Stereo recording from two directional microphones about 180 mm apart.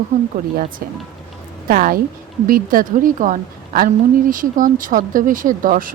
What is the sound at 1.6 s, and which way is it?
A woman's voice, 50° right (ahead or behind).